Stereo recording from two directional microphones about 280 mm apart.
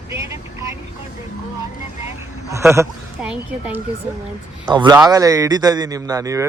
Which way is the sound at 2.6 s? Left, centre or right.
Centre.